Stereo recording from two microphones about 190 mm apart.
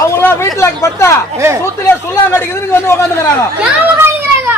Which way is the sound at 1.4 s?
15° right (ahead or behind).